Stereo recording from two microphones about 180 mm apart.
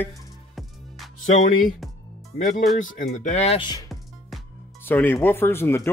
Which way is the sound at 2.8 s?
45° left (ahead or behind).